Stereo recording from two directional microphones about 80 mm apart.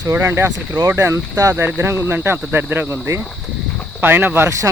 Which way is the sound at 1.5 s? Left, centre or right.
Right.